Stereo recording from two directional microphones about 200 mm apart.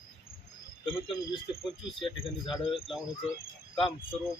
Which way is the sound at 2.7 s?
25° left (ahead or behind).